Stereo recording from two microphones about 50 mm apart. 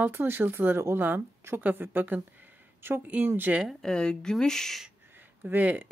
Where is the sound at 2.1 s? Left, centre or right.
Right.